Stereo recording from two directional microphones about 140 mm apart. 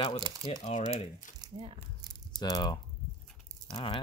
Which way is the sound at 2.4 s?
30° left (ahead or behind).